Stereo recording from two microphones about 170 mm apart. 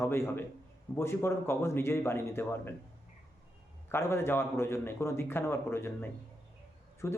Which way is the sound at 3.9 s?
15° left (ahead or behind).